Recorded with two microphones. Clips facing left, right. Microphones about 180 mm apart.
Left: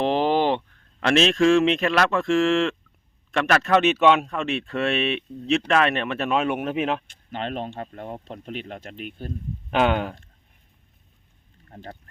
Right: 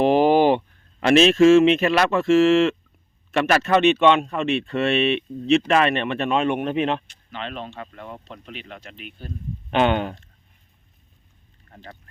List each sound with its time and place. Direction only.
0.0 s speech: 10° right (ahead or behind)
7.1 s speech: 50° left (ahead or behind)
9.6 s speech: centre (ahead or behind)
11.7 s speech: 50° left (ahead or behind)